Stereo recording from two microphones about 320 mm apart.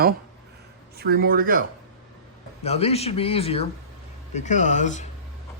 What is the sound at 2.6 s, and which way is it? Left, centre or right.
Speech, centre.